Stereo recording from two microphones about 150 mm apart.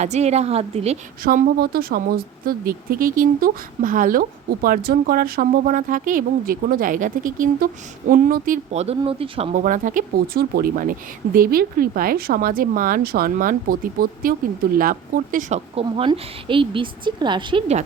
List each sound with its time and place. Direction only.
0.0 s a woman's voice: 45° right (ahead or behind)
1.2 s speech: 75° right (ahead or behind)
8.7 s a woman's voice: 45° right (ahead or behind)
9.6 s a woman's voice: 60° right (ahead or behind); by 17.6 s 30° right (ahead or behind)